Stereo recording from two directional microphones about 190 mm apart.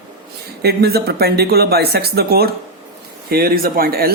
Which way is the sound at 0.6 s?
55° right (ahead or behind).